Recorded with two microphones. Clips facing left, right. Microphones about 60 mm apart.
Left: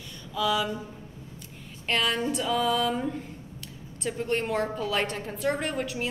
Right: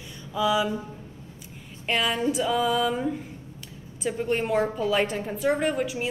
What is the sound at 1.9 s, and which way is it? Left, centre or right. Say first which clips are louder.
A woman's voice: right 2 dB; centre.